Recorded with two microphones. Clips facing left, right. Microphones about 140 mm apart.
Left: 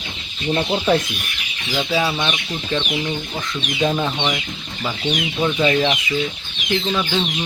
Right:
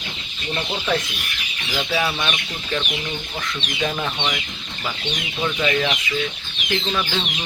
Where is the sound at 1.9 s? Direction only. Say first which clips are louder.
Left 2 dB; 15° left (ahead or behind).